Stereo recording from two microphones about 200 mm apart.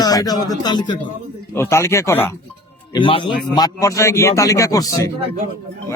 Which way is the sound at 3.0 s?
25° left (ahead or behind).